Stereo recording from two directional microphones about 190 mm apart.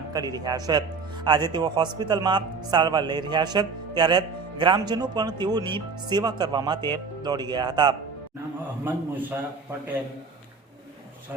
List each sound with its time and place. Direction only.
0.1 s speech: 20° right (ahead or behind)
8.8 s a man's voice: 10° right (ahead or behind)